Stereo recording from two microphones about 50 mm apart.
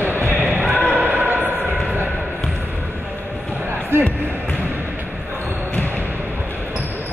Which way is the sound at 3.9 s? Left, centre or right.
Right.